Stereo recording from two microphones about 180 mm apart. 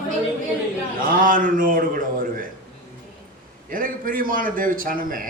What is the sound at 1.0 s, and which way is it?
A man's voice, 50° right (ahead or behind).